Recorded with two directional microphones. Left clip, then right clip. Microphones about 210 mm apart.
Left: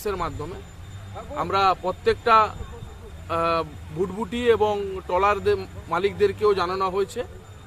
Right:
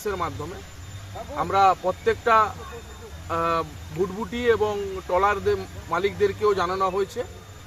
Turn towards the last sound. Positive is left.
turn(degrees=25)  # may be behind; listen again after turning